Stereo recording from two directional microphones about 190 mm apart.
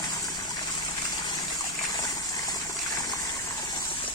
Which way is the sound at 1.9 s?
20° left (ahead or behind).